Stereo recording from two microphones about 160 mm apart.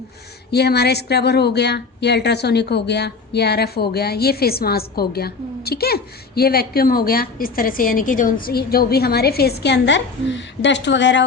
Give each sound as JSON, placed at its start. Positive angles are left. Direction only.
{"t": 0.5, "sound": "a woman's voice", "side_deg": 90}